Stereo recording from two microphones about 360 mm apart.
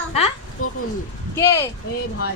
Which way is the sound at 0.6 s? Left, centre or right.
Left.